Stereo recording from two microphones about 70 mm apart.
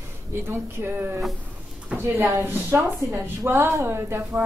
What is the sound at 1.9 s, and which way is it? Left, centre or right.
Speech, centre.